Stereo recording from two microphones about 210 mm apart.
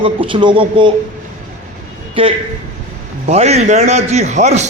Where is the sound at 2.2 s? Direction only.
25° right (ahead or behind).